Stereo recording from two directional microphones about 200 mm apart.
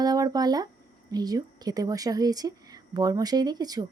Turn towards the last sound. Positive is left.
turn(degrees=-20)  # may be behind; listen again after turning